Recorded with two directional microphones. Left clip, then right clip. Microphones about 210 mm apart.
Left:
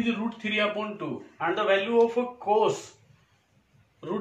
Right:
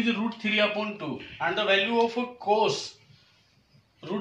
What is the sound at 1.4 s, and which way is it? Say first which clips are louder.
Speech: even; 20° left (ahead or behind).